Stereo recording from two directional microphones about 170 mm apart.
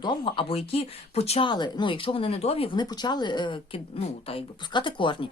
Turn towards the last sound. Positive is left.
turn(degrees=30)  # may be behind; listen again after turning